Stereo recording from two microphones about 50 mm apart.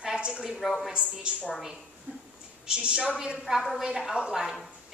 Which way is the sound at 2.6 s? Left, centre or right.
Centre.